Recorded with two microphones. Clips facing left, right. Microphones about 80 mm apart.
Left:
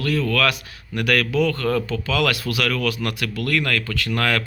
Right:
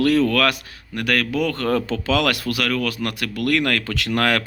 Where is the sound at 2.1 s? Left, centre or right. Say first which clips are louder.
Right 1 dB; right.